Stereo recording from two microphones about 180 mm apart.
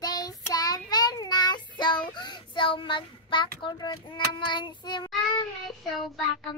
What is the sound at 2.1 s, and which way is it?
A child's voice, 25° left (ahead or behind).